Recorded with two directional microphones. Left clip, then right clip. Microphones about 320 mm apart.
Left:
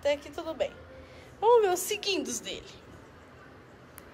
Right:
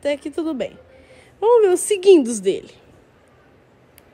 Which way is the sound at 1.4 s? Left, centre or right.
Right.